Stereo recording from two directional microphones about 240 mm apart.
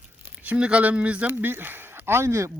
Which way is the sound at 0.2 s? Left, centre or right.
Centre.